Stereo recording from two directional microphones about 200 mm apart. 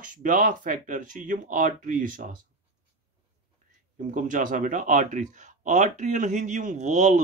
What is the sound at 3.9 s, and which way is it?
Speech, 40° right (ahead or behind).